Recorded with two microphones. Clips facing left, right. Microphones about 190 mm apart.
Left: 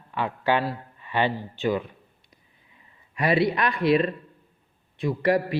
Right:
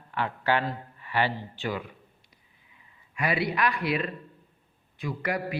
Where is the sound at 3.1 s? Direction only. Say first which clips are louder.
Left 6 dB; 35° left (ahead or behind).